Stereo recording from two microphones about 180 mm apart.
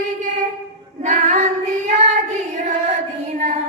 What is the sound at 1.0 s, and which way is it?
Child singing, 40° right (ahead or behind).